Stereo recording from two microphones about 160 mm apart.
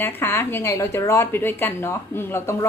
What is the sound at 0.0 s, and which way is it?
Speech, 15° left (ahead or behind).